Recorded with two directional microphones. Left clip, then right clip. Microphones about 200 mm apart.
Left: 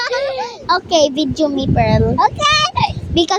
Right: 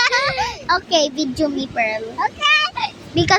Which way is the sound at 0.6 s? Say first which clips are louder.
Left 5 dB; 10° left (ahead or behind).